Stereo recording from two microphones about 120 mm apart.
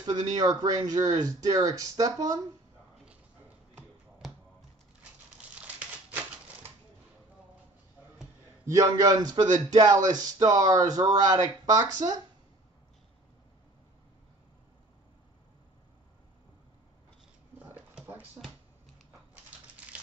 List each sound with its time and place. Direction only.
0.0 s speech: 35° right (ahead or behind)
5.5 s crumpling: 10° right (ahead or behind)
8.6 s speech: 30° right (ahead or behind)
17.6 s a sound: 15° right (ahead or behind)